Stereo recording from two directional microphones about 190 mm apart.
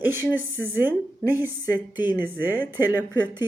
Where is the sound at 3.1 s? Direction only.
20° left (ahead or behind).